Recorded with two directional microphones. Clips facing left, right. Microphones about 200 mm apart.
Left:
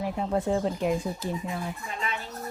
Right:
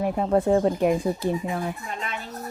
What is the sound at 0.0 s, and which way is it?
Speech, 55° right (ahead or behind).